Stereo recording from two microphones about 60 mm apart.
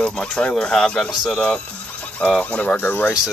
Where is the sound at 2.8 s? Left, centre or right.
Left.